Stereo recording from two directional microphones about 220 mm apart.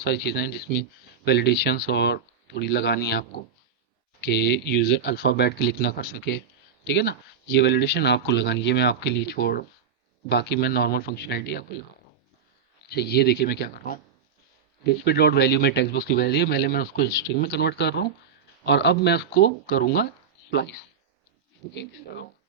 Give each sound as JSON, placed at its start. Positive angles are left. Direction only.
{"t": 0.0, "sound": "speech", "side_deg": 50}
{"t": 12.9, "sound": "speech", "side_deg": 45}